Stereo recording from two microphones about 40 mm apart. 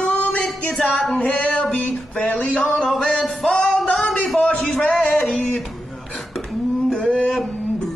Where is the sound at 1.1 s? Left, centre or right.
Left.